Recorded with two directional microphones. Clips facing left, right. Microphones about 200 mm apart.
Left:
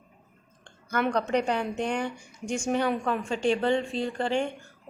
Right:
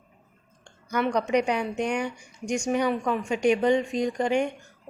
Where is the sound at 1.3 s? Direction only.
10° right (ahead or behind).